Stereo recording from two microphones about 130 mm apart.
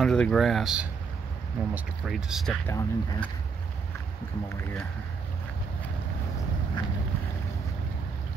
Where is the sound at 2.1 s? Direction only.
5° right (ahead or behind).